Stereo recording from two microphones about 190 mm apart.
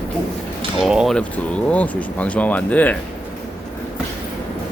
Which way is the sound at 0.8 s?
Centre (ahead or behind).